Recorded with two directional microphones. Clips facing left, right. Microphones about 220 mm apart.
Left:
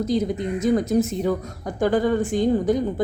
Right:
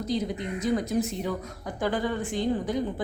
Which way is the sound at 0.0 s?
45° left (ahead or behind).